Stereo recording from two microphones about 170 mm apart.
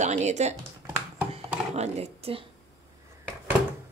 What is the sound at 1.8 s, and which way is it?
Speech, 40° right (ahead or behind).